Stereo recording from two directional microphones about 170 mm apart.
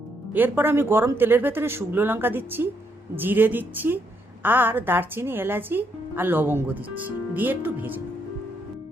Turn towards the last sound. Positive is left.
turn(degrees=-10)  # may be behind; listen again after turning